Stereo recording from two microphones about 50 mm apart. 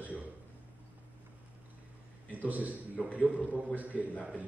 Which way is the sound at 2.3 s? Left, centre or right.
Right.